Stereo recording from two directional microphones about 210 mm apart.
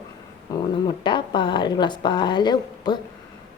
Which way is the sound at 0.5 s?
20° left (ahead or behind).